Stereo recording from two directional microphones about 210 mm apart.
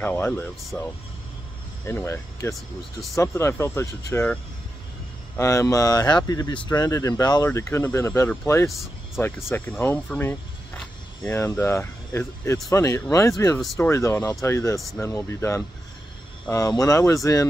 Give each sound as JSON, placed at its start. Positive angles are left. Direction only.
{"t": 0.0, "sound": "speech", "side_deg": 10}
{"t": 1.9, "sound": "speech", "side_deg": 10}
{"t": 5.4, "sound": "speech", "side_deg": 15}